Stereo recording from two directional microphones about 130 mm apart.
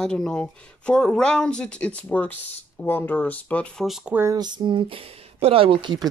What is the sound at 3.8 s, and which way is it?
Speech, centre (ahead or behind).